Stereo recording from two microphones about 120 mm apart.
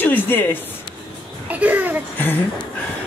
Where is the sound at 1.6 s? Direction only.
15° right (ahead or behind).